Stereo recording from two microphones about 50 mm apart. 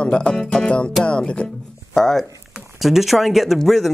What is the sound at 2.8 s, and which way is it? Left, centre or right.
Speech, centre.